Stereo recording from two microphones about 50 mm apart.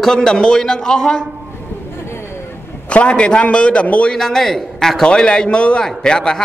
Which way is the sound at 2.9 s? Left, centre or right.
Left.